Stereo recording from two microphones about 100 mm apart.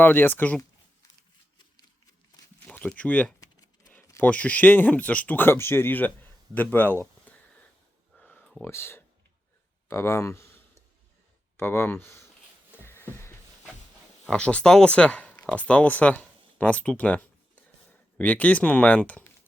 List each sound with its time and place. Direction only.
0.0 s speech: 20° left (ahead or behind)
2.7 s speech: 15° left (ahead or behind)
3.4 s typing: 40° left (ahead or behind)
4.2 s speech: 15° left (ahead or behind)
8.2 s a sound: 15° left (ahead or behind)
8.6 s speech: 25° left (ahead or behind)
9.9 s a sound: 25° left (ahead or behind)
11.5 s speech: 25° left (ahead or behind)
12.8 s a sound: 25° left (ahead or behind)
14.3 s speech: 10° left (ahead or behind)